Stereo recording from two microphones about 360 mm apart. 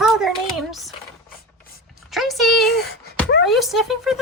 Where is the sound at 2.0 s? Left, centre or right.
Centre.